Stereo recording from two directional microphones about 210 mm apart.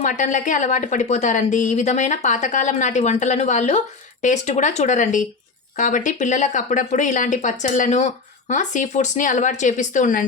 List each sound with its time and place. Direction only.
0.0 s a woman's voice: 35° left (ahead or behind)